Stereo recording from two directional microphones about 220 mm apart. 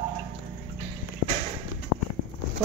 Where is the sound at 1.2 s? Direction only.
90° left.